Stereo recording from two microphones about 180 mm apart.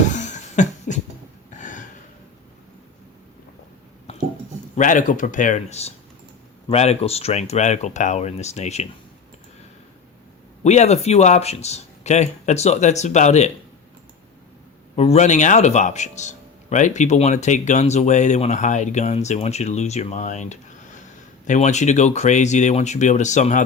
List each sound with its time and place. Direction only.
0.1 s beatboxing: 40° left (ahead or behind)
1.5 s a sound: 45° left (ahead or behind)
4.8 s a man's voice: 45° left (ahead or behind)
10.6 s a man's voice: 40° left (ahead or behind)
14.9 s a man's voice: 35° left (ahead or behind)